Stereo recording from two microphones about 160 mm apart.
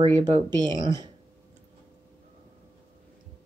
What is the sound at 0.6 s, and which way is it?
Speech, 25° right (ahead or behind).